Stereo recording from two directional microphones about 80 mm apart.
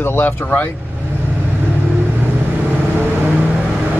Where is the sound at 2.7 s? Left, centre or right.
Right.